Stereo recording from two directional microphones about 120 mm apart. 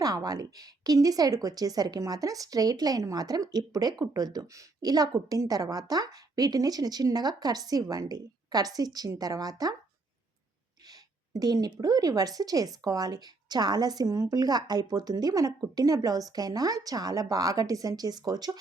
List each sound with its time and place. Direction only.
0.0 s a woman's voice: 30° right (ahead or behind)
10.8 s a woman's voice: 35° right (ahead or behind)